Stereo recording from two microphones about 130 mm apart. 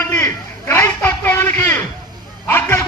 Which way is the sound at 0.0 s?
20° left (ahead or behind).